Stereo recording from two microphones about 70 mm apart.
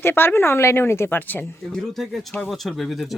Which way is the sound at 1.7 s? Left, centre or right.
Centre.